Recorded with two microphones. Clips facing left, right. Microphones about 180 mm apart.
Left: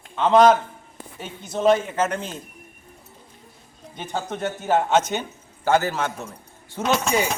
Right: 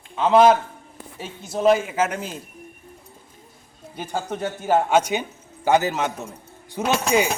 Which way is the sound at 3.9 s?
10° right (ahead or behind).